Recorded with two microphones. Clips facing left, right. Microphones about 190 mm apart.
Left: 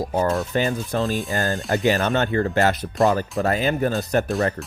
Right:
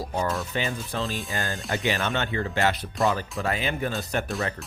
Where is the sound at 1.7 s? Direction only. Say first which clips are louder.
Left 7 dB; 40° left (ahead or behind).